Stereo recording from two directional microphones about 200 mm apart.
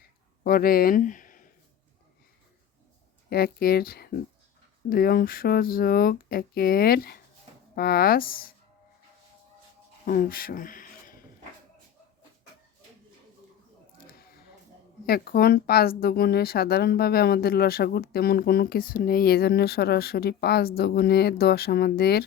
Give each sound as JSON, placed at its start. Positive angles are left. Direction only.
{"t": 0.4, "sound": "speech", "side_deg": 45}
{"t": 3.2, "sound": "speech", "side_deg": 50}
{"t": 10.1, "sound": "a sound", "side_deg": 45}
{"t": 15.0, "sound": "speech", "side_deg": 50}